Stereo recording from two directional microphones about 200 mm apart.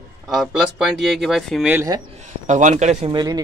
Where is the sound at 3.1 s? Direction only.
20° right (ahead or behind).